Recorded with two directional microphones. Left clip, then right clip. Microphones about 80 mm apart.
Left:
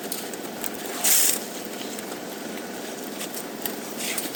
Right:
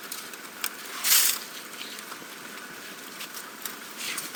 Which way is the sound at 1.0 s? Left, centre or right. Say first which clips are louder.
Even; centre.